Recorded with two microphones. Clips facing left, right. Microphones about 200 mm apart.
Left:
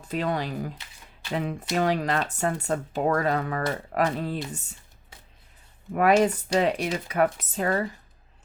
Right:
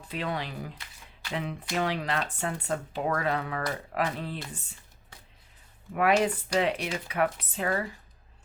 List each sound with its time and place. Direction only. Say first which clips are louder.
0.1 s speech: left 6 dB; 45° left (ahead or behind)
5.9 s speech: left 4 dB; 40° left (ahead or behind)